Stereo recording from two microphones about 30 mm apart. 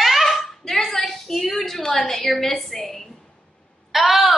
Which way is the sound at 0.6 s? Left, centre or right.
Centre.